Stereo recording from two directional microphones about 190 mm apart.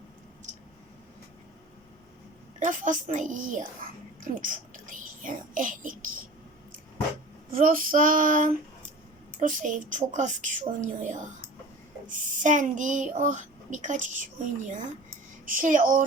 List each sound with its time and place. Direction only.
2.6 s a woman's voice: 40° right (ahead or behind)
7.5 s a woman's voice: 45° right (ahead or behind)